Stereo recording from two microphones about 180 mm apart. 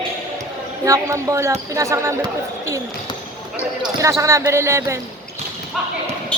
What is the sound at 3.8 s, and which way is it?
Speech, 15° right (ahead or behind).